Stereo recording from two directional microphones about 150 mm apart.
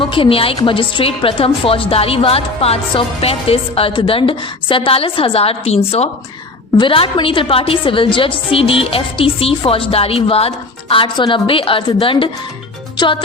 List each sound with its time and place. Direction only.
0.0 s a woman's voice: 35° left (ahead or behind)